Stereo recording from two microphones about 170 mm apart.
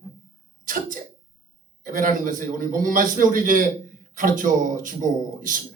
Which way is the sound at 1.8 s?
55° right (ahead or behind).